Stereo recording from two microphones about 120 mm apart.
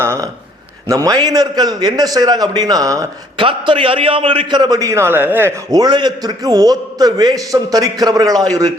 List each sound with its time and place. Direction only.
0.0 s a sound: 20° right (ahead or behind)
0.9 s a man's voice: 30° right (ahead or behind)
3.3 s a man's voice: 45° right (ahead or behind); by 5.5 s 15° right (ahead or behind)
5.7 s a man's voice: 35° right (ahead or behind)